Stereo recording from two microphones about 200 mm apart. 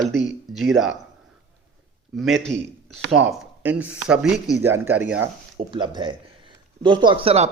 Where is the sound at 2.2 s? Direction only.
Centre (ahead or behind).